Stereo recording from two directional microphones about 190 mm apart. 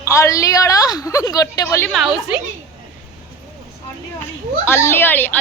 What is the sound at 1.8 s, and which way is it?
Speech, centre (ahead or behind).